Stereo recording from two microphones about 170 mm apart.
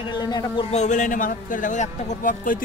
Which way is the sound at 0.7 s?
45° left (ahead or behind).